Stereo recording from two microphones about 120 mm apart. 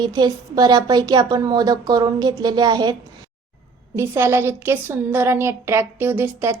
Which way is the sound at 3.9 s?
20° right (ahead or behind).